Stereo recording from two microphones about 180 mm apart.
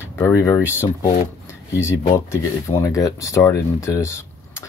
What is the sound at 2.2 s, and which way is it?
Speech, 15° left (ahead or behind).